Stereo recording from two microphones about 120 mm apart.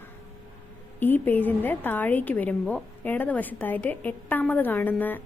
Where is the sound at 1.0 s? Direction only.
15° left (ahead or behind).